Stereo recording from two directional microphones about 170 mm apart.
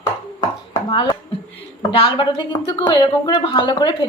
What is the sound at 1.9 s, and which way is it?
A woman's voice, 30° left (ahead or behind).